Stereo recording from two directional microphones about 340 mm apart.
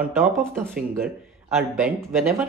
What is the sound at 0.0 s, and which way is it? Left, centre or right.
Speech, centre.